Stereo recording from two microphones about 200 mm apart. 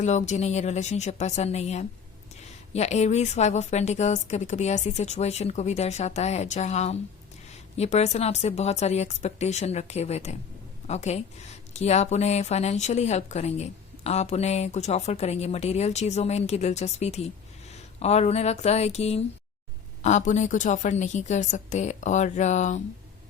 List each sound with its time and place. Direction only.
0.0 s a woman's voice: 35° left (ahead or behind)